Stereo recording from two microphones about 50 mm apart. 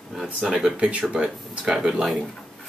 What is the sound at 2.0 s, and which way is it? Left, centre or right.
Speech, centre.